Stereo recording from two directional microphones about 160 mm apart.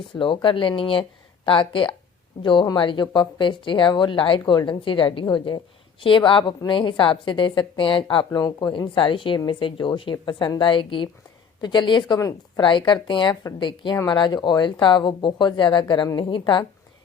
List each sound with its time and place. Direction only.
0.2 s a woman's voice: 30° left (ahead or behind)